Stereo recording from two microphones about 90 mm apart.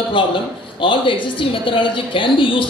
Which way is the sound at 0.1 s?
70° left (ahead or behind).